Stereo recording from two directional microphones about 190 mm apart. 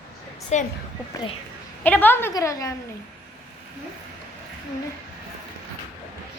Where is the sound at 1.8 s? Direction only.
10° left (ahead or behind).